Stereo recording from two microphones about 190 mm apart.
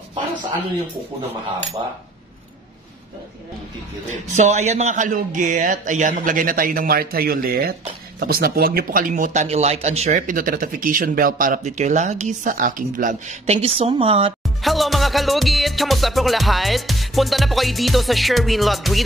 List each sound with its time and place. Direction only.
4.1 s speech: 40° right (ahead or behind)
14.4 s music: centre (ahead or behind)